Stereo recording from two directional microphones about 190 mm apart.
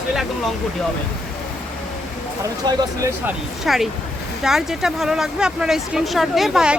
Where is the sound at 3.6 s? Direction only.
Centre (ahead or behind).